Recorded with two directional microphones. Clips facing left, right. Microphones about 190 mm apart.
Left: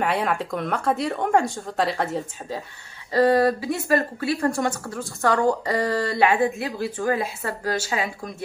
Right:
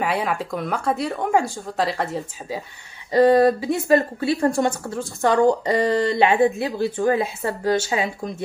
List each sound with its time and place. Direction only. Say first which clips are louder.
0.0 s speech: even; centre (ahead or behind)
3.1 s speech: right 3 dB; 20° right (ahead or behind)